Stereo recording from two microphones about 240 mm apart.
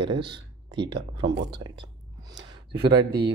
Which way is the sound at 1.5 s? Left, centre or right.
Centre.